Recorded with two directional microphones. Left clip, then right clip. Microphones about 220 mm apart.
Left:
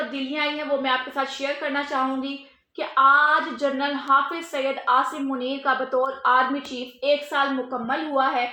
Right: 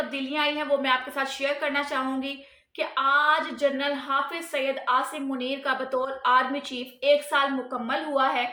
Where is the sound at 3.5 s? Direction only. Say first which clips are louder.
Left 1 dB; 15° right (ahead or behind).